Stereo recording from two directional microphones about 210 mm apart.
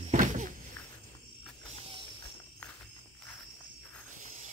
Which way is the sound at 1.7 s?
25° right (ahead or behind).